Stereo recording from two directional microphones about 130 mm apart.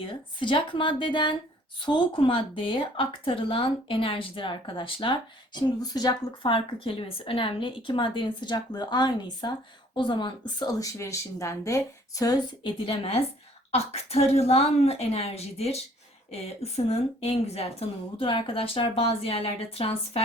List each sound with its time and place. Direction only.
0.0 s a woman's voice: 40° left (ahead or behind)
12.8 s a woman's voice: 45° left (ahead or behind)